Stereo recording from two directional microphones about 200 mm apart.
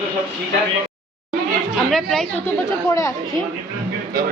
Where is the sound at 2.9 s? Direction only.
15° left (ahead or behind).